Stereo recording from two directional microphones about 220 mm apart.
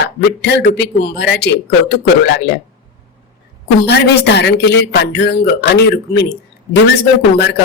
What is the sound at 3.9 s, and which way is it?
Speech, 50° left (ahead or behind).